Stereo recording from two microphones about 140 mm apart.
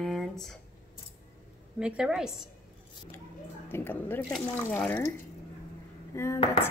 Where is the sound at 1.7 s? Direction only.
5° right (ahead or behind).